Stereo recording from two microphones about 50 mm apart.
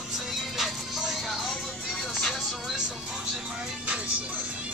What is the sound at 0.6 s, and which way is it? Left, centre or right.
Music, centre.